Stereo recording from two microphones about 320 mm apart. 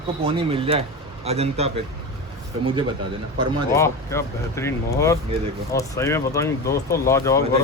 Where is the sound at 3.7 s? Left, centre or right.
Centre.